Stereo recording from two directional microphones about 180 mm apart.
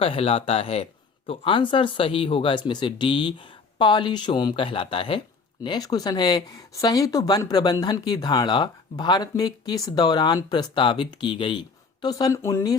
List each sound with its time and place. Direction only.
0.0 s speech: 30° left (ahead or behind); by 12.7 s 15° left (ahead or behind)